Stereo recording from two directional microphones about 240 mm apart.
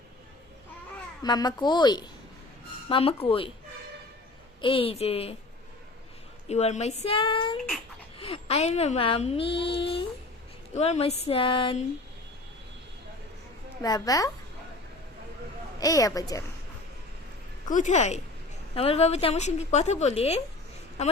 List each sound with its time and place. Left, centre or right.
1.2 s speech: centre
4.6 s speech: left
6.5 s speech: left
13.8 s speech: centre
15.8 s speech: centre
17.7 s speech: left